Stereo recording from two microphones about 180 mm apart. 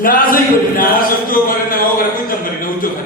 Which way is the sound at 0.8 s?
50° left (ahead or behind).